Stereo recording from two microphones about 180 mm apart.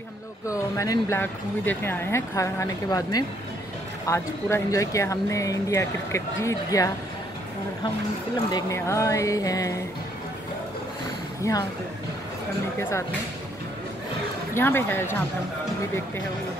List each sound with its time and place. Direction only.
0.5 s speech: 15° left (ahead or behind)
8.5 s speech: 20° left (ahead or behind)
11.4 s speech: 15° left (ahead or behind)
14.5 s speech: 15° left (ahead or behind)